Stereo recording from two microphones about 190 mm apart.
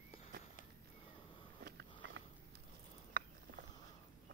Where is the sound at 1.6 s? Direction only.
65° right (ahead or behind).